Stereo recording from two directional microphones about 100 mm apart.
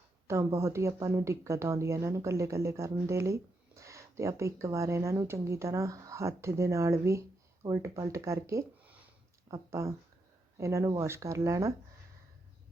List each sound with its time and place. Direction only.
0.3 s speech: 30° right (ahead or behind)